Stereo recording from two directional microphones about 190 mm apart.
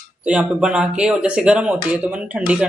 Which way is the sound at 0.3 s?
5° right (ahead or behind).